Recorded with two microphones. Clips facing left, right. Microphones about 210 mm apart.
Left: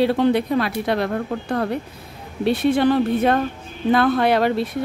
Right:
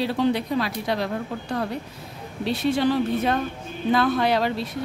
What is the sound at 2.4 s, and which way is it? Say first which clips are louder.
A woman's voice: left 5 dB; 55° left (ahead or behind).